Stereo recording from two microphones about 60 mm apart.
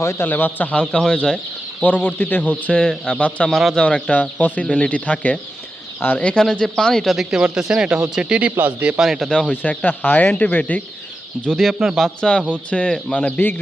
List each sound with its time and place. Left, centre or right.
0.0 s a man's voice: left
0.3 s speech: left; by 1.4 s centre
1.8 s speech: left
3.5 s speech: centre
3.8 s speech: left; by 8.5 s centre
9.0 s speech: centre
9.5 s speech: left
11.3 s speech: centre
12.0 s speech: centre